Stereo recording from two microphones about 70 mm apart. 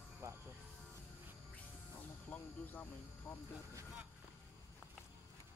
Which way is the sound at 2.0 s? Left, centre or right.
Left.